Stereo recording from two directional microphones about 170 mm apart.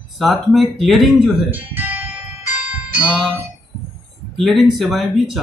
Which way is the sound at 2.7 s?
10° right (ahead or behind).